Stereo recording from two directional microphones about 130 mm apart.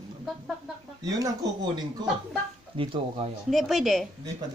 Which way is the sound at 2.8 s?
45° right (ahead or behind).